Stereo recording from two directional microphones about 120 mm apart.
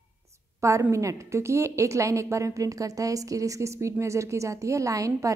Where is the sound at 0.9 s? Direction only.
25° right (ahead or behind).